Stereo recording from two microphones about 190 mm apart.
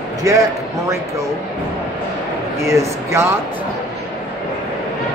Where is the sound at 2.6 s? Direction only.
15° right (ahead or behind).